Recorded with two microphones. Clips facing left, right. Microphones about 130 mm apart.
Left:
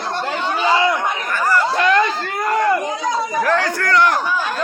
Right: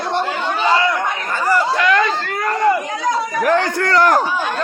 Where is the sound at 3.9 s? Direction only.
40° right (ahead or behind).